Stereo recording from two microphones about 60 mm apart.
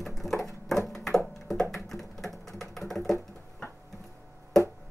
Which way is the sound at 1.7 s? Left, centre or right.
Centre.